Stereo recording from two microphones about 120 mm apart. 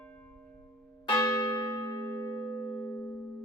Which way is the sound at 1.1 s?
30° left (ahead or behind).